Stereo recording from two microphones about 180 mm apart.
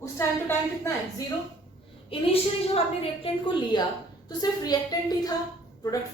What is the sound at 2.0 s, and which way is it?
A woman's voice, 30° left (ahead or behind).